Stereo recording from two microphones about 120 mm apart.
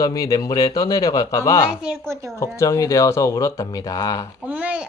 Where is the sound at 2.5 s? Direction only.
25° left (ahead or behind).